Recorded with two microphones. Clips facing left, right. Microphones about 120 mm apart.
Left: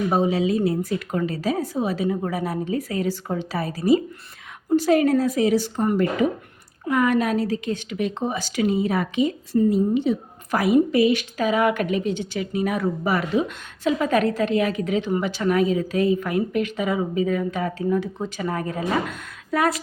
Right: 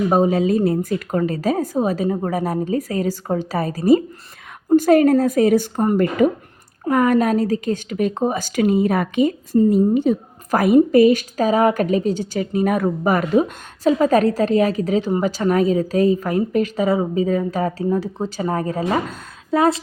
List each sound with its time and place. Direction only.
0.1 s a woman's voice: 45° right (ahead or behind); by 19.8 s 25° right (ahead or behind)